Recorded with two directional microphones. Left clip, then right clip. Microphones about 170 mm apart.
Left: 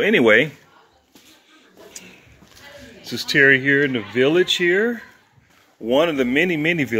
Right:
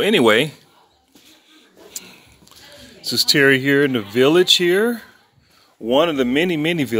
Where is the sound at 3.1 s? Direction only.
30° right (ahead or behind).